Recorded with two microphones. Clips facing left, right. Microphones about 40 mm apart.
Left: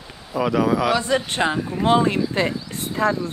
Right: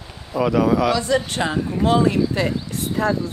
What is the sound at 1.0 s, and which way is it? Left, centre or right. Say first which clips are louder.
Speech: even; left.